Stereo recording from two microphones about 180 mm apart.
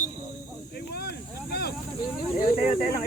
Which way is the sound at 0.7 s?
60° left (ahead or behind).